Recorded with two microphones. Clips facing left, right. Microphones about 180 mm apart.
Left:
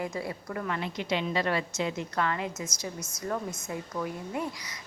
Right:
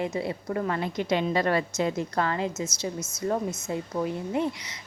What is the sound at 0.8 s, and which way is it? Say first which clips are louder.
A woman's voice: right 5 dB; 45° right (ahead or behind).